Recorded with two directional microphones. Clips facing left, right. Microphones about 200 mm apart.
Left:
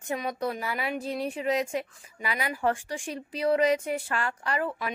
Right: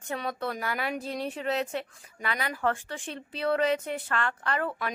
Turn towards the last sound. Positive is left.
turn(degrees=5)  # may be behind; listen again after turning